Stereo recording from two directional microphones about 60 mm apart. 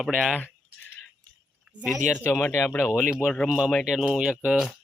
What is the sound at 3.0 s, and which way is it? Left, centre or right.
Speech, centre.